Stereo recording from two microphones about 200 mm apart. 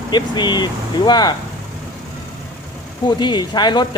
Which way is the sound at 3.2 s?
20° left (ahead or behind).